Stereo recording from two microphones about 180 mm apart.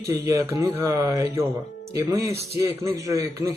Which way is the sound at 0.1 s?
20° right (ahead or behind).